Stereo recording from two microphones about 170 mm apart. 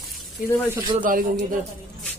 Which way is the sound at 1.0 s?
50° right (ahead or behind).